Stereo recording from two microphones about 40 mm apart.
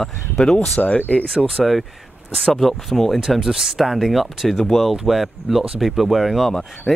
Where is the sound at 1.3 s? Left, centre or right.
Centre.